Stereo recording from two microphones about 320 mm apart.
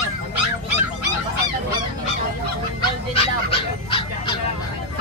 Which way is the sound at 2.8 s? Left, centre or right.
Centre.